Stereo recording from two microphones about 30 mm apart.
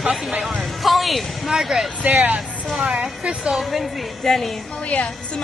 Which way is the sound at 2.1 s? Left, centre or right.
Right.